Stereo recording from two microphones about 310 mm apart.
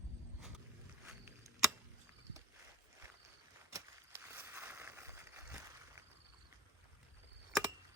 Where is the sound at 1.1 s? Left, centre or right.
Centre.